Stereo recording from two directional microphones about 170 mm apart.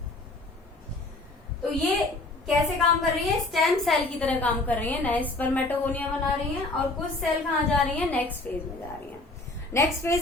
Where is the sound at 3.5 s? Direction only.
5° left (ahead or behind).